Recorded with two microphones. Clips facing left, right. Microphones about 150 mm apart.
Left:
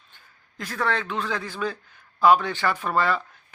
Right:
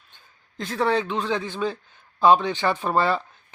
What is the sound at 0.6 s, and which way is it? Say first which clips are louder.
Speech: right 4 dB; 25° right (ahead or behind).